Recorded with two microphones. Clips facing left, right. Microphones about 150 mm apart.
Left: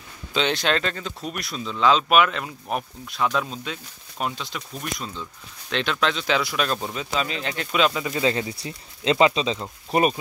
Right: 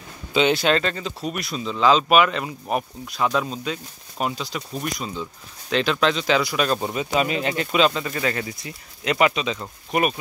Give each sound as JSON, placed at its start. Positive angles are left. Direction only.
{"t": 0.3, "sound": "speech", "side_deg": -5}
{"t": 6.8, "sound": "speech", "side_deg": -10}
{"t": 8.0, "sound": "speech", "side_deg": 20}